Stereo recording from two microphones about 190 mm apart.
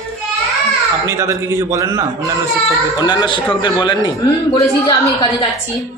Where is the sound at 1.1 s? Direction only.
15° right (ahead or behind).